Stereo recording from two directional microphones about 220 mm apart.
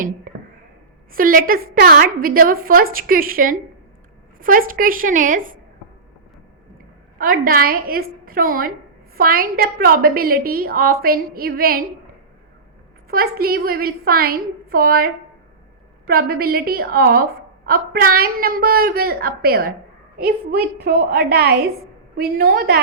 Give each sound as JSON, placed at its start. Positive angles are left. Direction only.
{"t": 0.3, "sound": "a sound", "side_deg": -40}
{"t": 1.1, "sound": "a woman's voice", "side_deg": -40}
{"t": 7.2, "sound": "a woman's voice", "side_deg": -40}
{"t": 13.1, "sound": "a woman's voice", "side_deg": -40}